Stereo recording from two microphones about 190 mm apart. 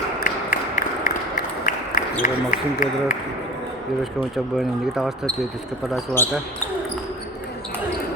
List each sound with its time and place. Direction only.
0.2 s a sound: 45° left (ahead or behind)
2.2 s speech: 45° left (ahead or behind)
4.5 s speech: centre (ahead or behind)
6.2 s speech: 15° left (ahead or behind)